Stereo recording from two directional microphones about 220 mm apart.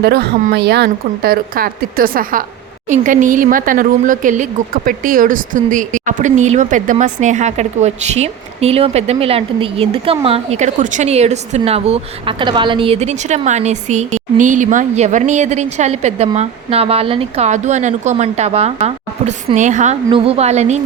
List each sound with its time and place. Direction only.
0.0 s a woman's voice: 45° right (ahead or behind); by 20.8 s 30° right (ahead or behind)